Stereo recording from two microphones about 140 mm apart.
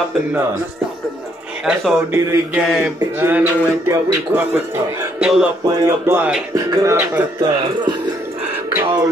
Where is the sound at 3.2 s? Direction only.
15° right (ahead or behind).